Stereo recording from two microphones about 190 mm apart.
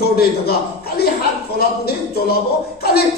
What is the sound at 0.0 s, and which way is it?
A man's voice, 55° left (ahead or behind).